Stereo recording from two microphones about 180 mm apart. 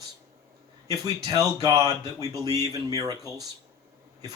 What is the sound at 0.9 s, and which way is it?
Speech, 20° right (ahead or behind).